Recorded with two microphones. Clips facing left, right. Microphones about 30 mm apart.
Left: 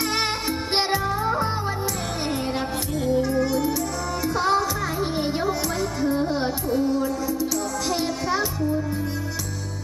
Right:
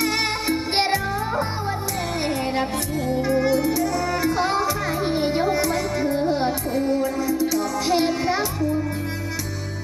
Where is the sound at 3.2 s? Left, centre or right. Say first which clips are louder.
Right 2 dB; right.